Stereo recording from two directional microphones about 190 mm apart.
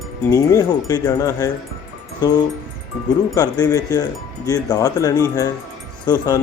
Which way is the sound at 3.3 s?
20° left (ahead or behind).